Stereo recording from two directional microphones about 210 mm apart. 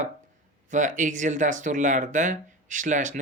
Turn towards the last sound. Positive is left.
turn(degrees=-40)  # may be behind; listen again after turning